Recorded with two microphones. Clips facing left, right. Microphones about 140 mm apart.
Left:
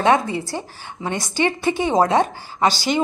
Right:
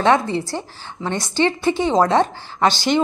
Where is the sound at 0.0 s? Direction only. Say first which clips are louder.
Right 1 dB; 15° left (ahead or behind).